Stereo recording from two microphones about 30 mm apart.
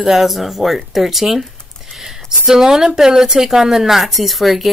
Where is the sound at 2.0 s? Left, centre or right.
Centre.